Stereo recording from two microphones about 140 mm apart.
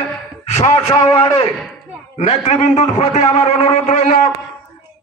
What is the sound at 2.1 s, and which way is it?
A man's voice, 50° left (ahead or behind).